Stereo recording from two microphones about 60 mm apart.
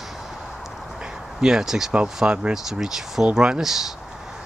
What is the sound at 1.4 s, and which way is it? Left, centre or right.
Speech, centre.